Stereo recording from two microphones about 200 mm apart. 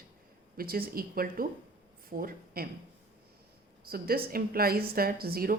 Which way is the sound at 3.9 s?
50° right (ahead or behind).